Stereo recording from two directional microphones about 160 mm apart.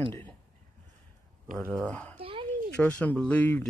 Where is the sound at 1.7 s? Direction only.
10° left (ahead or behind).